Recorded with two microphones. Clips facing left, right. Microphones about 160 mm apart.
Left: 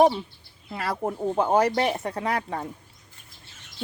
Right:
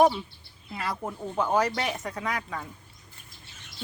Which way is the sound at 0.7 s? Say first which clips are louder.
Left 3 dB; 60° left (ahead or behind).